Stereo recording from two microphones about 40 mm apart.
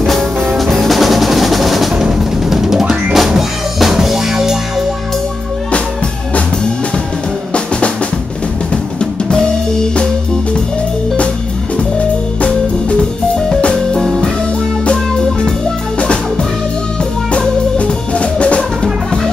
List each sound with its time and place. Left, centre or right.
0.4 s music: centre
2.1 s drum kit: centre
9.3 s music: centre
13.9 s music: centre
17.3 s music: left